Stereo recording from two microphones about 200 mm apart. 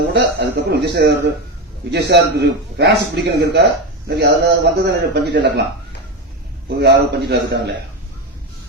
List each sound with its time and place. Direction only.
0.1 s a man's voice: 60° right (ahead or behind)
6.7 s a man's voice: 55° right (ahead or behind)